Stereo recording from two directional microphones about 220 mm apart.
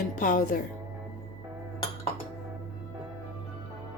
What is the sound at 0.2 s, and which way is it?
Speech, 35° left (ahead or behind).